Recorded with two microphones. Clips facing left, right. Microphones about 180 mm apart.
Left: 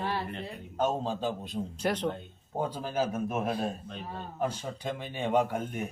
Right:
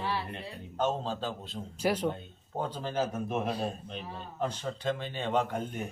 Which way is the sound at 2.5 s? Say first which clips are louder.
Left 1 dB; 10° left (ahead or behind).